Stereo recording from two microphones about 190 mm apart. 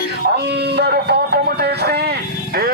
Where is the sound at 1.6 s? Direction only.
60° right (ahead or behind).